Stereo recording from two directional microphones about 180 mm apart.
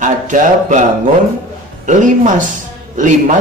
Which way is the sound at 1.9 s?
45° right (ahead or behind).